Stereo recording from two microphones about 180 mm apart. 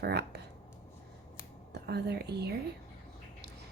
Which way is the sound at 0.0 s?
65° right (ahead or behind).